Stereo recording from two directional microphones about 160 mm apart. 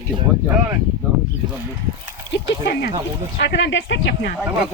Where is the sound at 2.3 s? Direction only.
90° left.